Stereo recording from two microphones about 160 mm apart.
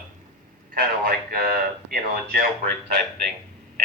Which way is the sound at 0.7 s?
70° right (ahead or behind).